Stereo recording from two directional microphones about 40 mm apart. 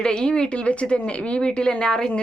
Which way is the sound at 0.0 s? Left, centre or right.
Left.